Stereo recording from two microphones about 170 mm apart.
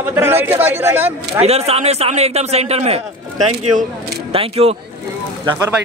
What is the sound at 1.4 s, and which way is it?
A man's voice, 40° right (ahead or behind).